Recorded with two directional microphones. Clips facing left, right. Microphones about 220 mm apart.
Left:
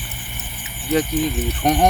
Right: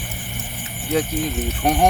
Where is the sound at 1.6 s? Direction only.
10° right (ahead or behind).